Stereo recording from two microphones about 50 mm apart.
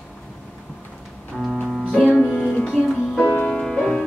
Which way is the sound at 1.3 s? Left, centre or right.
Centre.